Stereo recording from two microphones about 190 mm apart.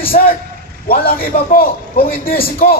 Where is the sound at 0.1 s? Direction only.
40° left (ahead or behind).